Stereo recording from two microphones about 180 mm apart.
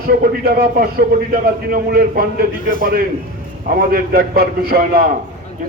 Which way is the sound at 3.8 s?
55° right (ahead or behind).